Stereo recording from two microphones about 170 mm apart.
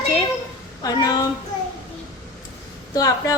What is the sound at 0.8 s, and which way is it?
Speech, 20° left (ahead or behind).